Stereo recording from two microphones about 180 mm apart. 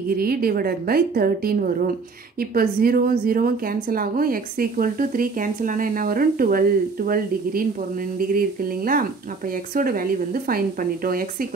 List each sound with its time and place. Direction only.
0.1 s a woman's voice: 55° right (ahead or behind)